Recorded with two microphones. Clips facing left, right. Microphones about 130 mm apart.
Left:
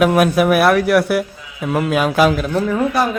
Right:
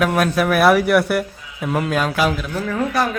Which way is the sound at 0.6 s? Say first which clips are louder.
Left 1 dB; centre (ahead or behind).